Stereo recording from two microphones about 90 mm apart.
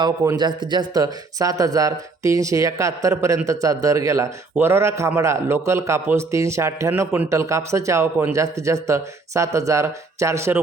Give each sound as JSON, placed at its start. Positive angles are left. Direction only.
{"t": 0.3, "sound": "speech", "side_deg": -55}